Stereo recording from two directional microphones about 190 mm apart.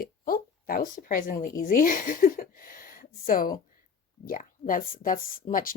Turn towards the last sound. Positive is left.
turn(degrees=45)  # may be behind; listen again after turning